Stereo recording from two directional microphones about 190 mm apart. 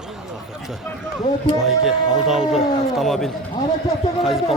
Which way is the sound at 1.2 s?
25° left (ahead or behind).